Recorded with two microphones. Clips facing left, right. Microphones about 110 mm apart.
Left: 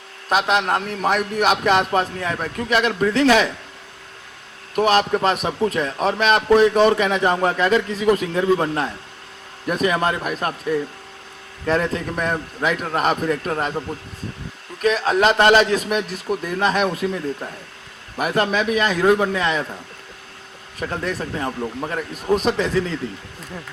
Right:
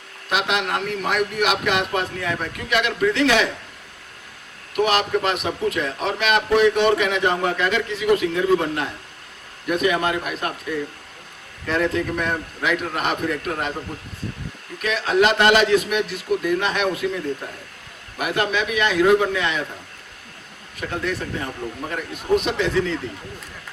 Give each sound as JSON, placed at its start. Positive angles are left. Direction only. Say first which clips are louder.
{"t": 0.3, "sound": "a man's voice", "louder": "left 4 dB", "side_deg": 40}
{"t": 4.7, "sound": "a man's voice", "louder": "left 3 dB", "side_deg": 35}
{"t": 14.8, "sound": "a man's voice", "louder": "left 1 dB", "side_deg": 35}
{"t": 18.2, "sound": "a man's voice", "louder": "left 3 dB", "side_deg": 35}
{"t": 20.7, "sound": "a man's voice", "louder": "left 1 dB", "side_deg": 35}